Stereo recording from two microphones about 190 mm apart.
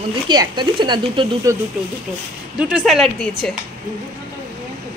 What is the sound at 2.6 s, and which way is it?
Speech, 5° right (ahead or behind).